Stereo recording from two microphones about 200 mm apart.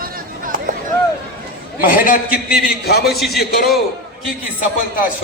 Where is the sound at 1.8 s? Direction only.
45° left (ahead or behind).